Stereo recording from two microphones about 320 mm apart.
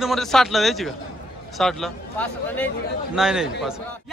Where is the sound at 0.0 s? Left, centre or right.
Centre.